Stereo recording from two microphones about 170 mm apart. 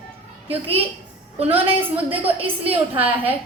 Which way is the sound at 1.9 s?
10° right (ahead or behind).